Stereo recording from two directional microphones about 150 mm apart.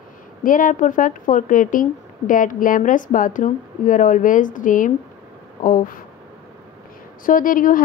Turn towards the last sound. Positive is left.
turn(degrees=65)  # may be behind; listen again after turning